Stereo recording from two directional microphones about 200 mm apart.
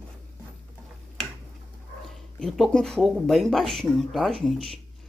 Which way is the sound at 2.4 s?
Centre (ahead or behind).